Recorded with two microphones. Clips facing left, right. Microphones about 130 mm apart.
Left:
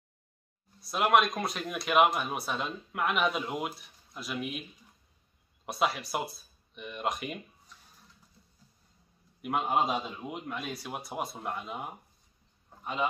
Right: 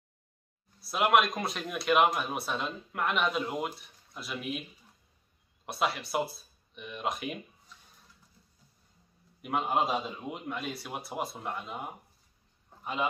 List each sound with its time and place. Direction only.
0.7 s speech: centre (ahead or behind)
5.7 s speech: centre (ahead or behind)
9.4 s speech: centre (ahead or behind)